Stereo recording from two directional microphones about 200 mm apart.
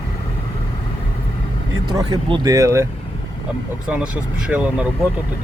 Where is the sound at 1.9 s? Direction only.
20° right (ahead or behind).